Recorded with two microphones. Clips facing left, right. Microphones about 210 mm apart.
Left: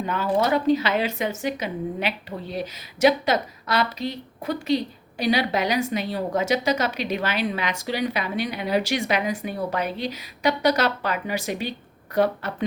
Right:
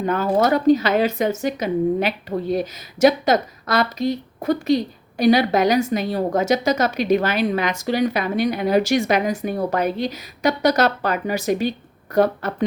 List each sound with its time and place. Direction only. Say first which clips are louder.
0.0 s speech: right 4 dB; 45° right (ahead or behind)